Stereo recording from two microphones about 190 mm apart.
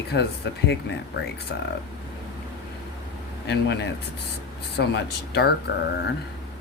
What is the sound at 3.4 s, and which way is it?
Speech, 60° left (ahead or behind).